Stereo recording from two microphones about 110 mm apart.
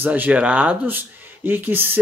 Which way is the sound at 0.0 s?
15° right (ahead or behind).